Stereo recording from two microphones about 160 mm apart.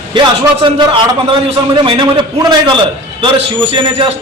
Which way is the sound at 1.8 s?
30° right (ahead or behind).